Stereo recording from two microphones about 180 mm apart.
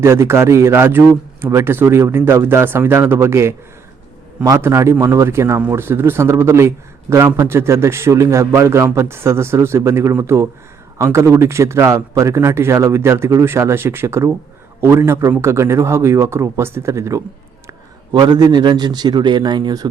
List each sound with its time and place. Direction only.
0.0 s a man's voice: 15° right (ahead or behind)